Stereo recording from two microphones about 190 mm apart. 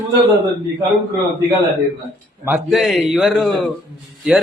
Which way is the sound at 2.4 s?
Centre (ahead or behind).